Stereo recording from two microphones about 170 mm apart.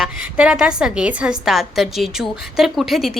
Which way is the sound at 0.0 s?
5° right (ahead or behind).